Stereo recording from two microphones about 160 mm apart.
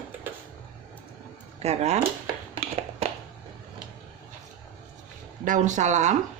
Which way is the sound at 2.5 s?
40° right (ahead or behind).